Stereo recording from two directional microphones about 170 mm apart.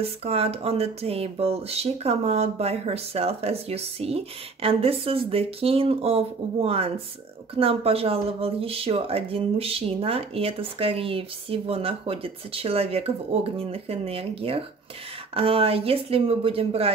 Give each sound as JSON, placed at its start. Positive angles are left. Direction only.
{"t": 0.0, "sound": "speech", "side_deg": -35}